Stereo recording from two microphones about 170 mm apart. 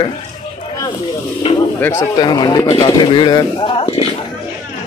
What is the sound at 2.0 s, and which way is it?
Speech, 25° left (ahead or behind).